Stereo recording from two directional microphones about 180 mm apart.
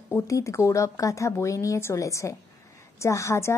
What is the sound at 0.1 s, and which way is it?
A woman's voice, 15° left (ahead or behind).